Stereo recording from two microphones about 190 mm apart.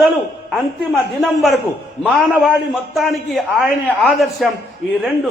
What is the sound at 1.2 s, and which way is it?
A man's voice, centre (ahead or behind).